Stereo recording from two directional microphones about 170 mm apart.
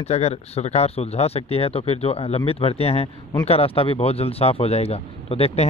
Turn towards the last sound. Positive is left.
turn(degrees=35)  # may be behind; listen again after turning